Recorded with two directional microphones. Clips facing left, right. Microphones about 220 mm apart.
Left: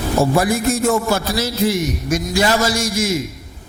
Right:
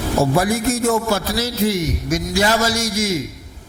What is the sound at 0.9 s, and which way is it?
A man's voice, 15° left (ahead or behind).